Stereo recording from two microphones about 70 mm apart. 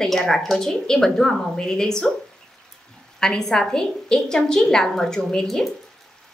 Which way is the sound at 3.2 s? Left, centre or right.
Centre.